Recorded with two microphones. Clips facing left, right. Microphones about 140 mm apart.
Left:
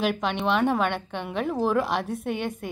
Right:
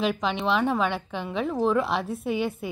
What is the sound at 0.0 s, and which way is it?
A woman's voice, centre (ahead or behind).